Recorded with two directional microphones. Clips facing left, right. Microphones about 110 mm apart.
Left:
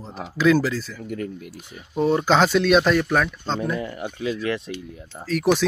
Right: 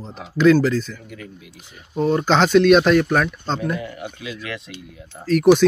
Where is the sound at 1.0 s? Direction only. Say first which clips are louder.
Left 8 dB; 50° left (ahead or behind).